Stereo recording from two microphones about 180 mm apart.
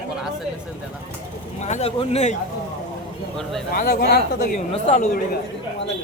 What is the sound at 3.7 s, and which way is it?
Speech, 50° left (ahead or behind).